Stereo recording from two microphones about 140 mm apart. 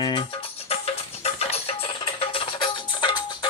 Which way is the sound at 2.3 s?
35° left (ahead or behind).